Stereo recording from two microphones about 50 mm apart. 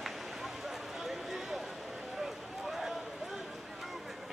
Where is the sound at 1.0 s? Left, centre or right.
Centre.